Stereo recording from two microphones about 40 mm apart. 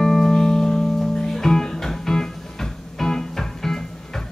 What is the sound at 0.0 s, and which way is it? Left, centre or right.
Music, centre.